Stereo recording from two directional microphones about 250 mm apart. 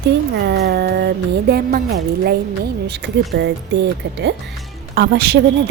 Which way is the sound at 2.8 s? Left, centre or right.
Right.